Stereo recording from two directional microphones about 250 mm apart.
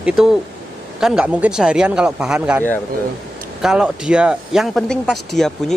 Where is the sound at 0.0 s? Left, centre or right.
Centre.